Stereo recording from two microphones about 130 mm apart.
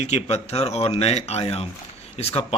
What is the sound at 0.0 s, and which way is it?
Speech, 55° left (ahead or behind).